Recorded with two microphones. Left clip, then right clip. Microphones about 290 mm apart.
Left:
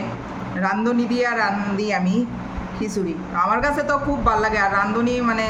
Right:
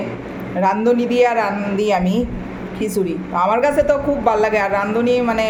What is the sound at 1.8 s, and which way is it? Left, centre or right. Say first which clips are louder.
Speech: right 6 dB; centre.